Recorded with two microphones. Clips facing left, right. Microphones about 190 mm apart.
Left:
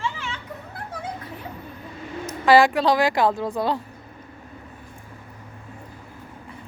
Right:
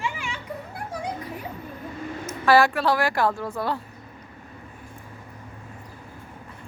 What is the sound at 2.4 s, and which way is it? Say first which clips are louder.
A woman's voice: left 3 dB; 15° left (ahead or behind).